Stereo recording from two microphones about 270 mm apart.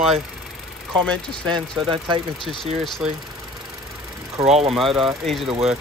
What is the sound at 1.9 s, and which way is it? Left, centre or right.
Speech, centre.